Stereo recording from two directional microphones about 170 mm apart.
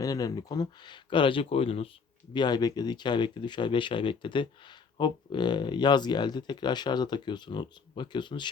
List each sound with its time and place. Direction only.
0.0 s speech: 20° left (ahead or behind)